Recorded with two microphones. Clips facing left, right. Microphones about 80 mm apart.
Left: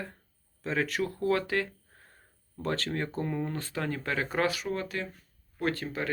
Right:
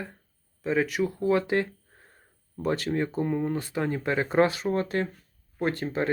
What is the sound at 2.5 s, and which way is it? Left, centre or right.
Speech, centre.